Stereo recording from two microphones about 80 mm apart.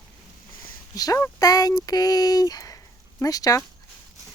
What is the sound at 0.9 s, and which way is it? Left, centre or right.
Speech, left.